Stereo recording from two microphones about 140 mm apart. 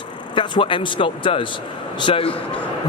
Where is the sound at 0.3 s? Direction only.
35° left (ahead or behind).